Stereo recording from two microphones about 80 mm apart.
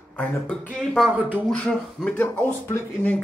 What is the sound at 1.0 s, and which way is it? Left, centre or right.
Speech, right.